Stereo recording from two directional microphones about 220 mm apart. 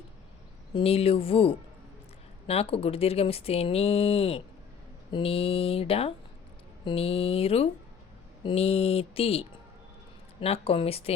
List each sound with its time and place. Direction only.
0.7 s speech: 25° left (ahead or behind)